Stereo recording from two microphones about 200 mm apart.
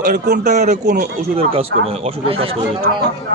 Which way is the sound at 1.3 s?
30° right (ahead or behind).